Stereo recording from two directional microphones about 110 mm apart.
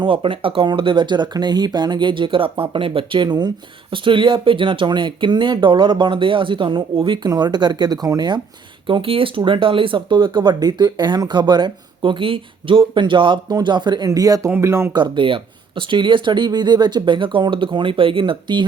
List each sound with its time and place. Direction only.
0.0 s speech: 55° right (ahead or behind); by 8.4 s 35° right (ahead or behind)
8.9 s speech: 55° right (ahead or behind); by 14.8 s 25° right (ahead or behind)
14.9 s speech: 45° right (ahead or behind)